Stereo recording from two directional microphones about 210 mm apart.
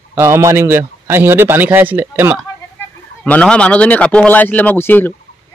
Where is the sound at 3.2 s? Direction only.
5° left (ahead or behind).